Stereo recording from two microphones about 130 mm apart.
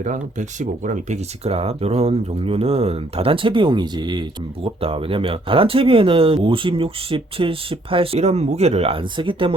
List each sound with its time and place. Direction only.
0.0 s speech: 70° right (ahead or behind); by 4.3 s 35° right (ahead or behind)
4.6 s speech: 45° right (ahead or behind)